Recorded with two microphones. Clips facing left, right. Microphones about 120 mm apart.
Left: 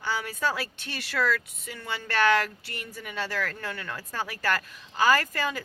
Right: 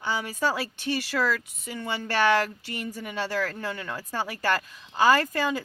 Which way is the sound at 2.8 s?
40° right (ahead or behind).